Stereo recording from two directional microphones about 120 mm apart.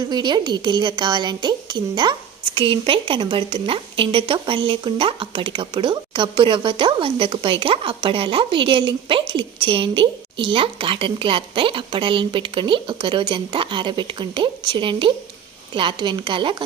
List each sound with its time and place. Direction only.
0.1 s speech: 35° right (ahead or behind)